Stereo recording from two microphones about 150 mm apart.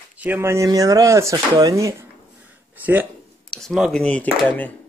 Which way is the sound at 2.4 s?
10° right (ahead or behind).